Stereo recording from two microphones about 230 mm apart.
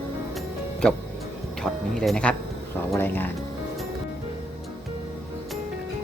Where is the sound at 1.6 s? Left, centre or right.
Centre.